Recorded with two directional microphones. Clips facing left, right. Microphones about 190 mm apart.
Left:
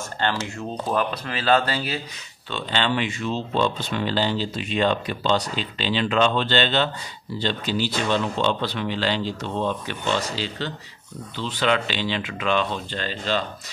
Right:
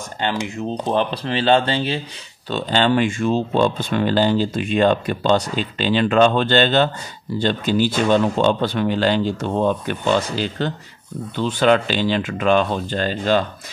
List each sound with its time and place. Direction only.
0.2 s speech: 15° right (ahead or behind)
2.5 s speech: 45° right (ahead or behind)